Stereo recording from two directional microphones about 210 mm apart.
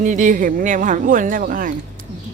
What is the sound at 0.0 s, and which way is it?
Speech, 35° right (ahead or behind).